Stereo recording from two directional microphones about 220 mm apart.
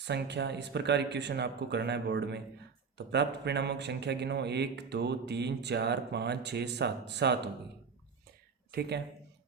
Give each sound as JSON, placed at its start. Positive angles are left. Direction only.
{"t": 0.0, "sound": "a man's voice", "side_deg": -50}
{"t": 8.7, "sound": "speech", "side_deg": -45}